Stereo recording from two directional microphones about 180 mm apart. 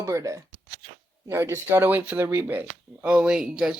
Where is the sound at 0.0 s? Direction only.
20° right (ahead or behind).